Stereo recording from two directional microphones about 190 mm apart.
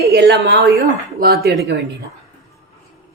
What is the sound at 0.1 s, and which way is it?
A woman's voice, 60° right (ahead or behind).